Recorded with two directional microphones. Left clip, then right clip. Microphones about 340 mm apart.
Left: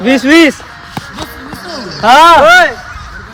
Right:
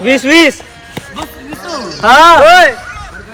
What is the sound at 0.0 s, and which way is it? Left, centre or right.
Speech, left.